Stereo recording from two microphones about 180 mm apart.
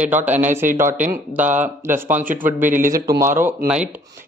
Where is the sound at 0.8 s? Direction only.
45° right (ahead or behind).